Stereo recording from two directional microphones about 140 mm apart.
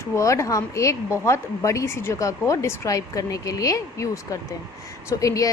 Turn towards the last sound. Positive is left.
turn(degrees=25)  # may be behind; listen again after turning